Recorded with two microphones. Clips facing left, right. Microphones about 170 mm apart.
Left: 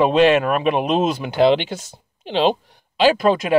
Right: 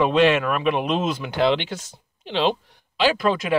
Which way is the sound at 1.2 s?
15° left (ahead or behind).